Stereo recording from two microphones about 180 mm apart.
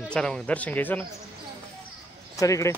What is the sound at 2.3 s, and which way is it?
Speech, 20° left (ahead or behind).